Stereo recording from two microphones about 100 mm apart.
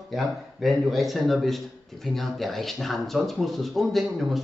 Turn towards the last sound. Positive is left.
turn(degrees=0)  # may be behind; listen again after turning